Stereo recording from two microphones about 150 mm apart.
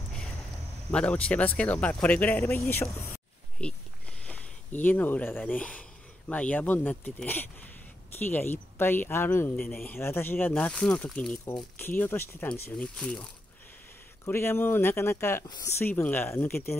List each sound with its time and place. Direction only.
0.9 s speech: 10° left (ahead or behind)
15.4 s speech: 30° left (ahead or behind)
15.8 s speech: 10° left (ahead or behind)